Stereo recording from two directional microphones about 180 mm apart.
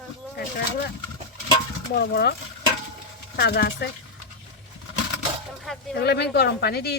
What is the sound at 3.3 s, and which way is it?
Speech, 65° left (ahead or behind).